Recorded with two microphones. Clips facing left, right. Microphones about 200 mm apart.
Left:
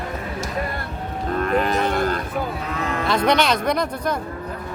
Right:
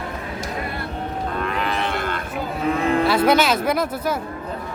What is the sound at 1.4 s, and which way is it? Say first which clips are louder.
Livestock: left 6 dB; 45° left (ahead or behind).